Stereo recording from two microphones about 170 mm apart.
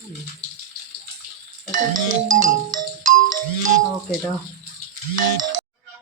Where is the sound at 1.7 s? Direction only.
50° right (ahead or behind).